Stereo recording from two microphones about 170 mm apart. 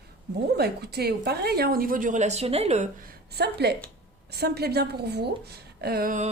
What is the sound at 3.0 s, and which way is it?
A woman's voice, 70° right (ahead or behind).